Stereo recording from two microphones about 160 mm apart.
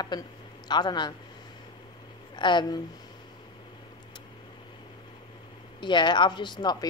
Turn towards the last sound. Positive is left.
turn(degrees=25)  # may be behind; listen again after turning